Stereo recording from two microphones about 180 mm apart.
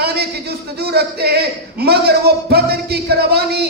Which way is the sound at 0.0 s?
65° right (ahead or behind).